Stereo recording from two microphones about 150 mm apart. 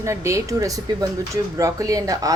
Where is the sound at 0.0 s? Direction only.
20° right (ahead or behind).